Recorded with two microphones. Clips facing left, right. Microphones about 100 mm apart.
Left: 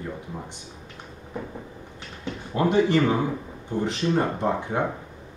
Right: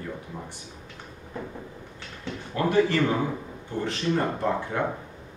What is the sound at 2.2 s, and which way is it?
Speech, 20° left (ahead or behind).